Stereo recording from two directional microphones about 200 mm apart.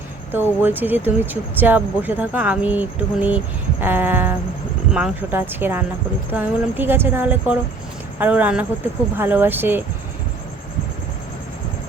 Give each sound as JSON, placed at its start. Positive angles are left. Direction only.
{"t": 0.3, "sound": "speech", "side_deg": -10}